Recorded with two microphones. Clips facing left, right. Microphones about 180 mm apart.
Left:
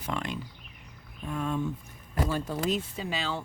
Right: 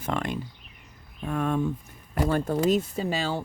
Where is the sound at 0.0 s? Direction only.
50° right (ahead or behind).